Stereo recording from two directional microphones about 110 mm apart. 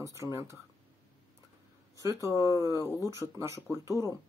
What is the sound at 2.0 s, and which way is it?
Speech, 30° right (ahead or behind).